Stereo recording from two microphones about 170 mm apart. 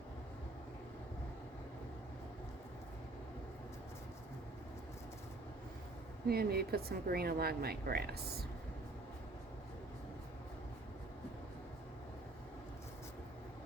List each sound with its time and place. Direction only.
6.2 s a woman's voice: 65° right (ahead or behind)